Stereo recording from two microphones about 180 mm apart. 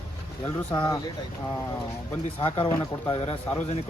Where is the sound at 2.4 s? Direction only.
30° left (ahead or behind).